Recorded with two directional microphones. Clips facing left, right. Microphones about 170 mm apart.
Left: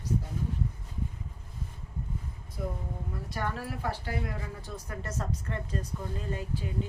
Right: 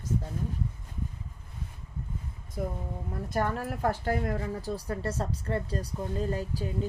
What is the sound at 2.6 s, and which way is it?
A woman's voice, 55° right (ahead or behind).